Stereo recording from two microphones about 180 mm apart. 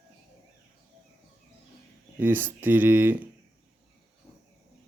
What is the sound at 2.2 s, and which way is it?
Speech, 10° right (ahead or behind).